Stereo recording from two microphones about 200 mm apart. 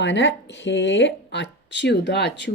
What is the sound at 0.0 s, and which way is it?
Speech, 65° left (ahead or behind).